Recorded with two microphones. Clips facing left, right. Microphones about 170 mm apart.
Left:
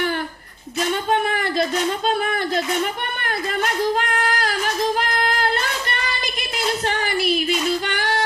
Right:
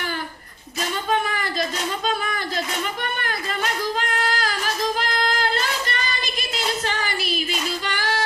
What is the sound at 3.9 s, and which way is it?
Female singing, 55° left (ahead or behind).